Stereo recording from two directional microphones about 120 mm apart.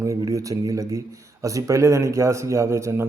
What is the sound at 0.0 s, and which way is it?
Speech, 25° right (ahead or behind).